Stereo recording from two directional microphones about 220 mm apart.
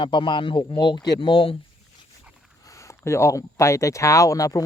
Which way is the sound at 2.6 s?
15° left (ahead or behind).